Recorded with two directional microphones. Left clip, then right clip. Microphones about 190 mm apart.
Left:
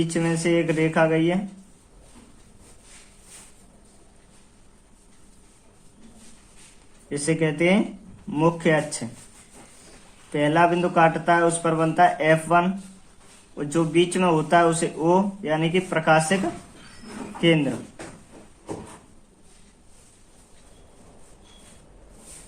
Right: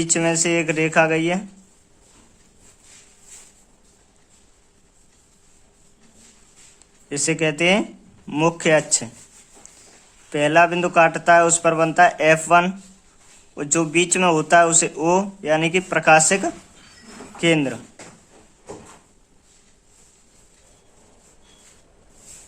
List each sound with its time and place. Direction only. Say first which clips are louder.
0.0 s speech: right 4 dB; 50° right (ahead or behind)
7.1 s speech: right 3 dB; 45° right (ahead or behind)
10.3 s speech: right 4 dB; 45° right (ahead or behind)